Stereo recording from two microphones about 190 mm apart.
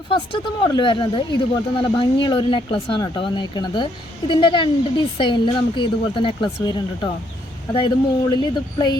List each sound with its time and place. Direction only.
0.1 s speech: 25° left (ahead or behind)